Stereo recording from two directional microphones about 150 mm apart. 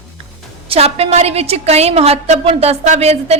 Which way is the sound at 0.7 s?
45° right (ahead or behind).